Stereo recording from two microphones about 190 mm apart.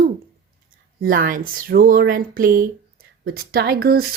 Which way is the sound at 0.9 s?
45° right (ahead or behind).